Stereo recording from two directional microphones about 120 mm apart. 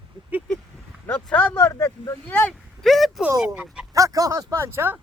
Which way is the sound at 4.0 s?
30° right (ahead or behind).